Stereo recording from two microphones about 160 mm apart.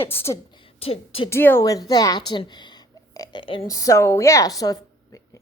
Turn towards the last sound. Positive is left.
turn(degrees=20)  # may be behind; listen again after turning